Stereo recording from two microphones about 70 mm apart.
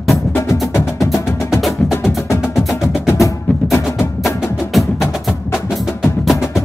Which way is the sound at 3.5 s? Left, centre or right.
Left.